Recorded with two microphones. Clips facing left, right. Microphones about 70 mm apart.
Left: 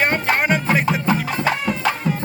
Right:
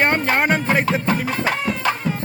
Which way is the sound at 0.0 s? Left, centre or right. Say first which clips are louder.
Right 1 dB; right.